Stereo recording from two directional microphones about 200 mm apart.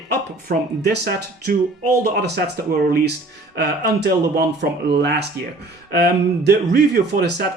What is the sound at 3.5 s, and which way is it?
Speech, 55° right (ahead or behind).